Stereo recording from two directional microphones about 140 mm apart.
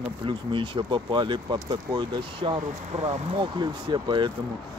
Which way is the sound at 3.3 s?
35° right (ahead or behind).